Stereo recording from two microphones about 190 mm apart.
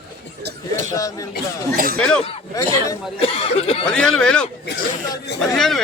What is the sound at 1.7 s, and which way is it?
Speech, 50° right (ahead or behind).